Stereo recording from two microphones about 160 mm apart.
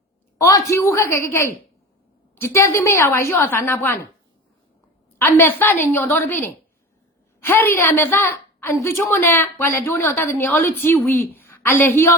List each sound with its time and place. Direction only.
0.3 s a woman's voice: 20° left (ahead or behind)
5.2 s a woman's voice: 15° left (ahead or behind)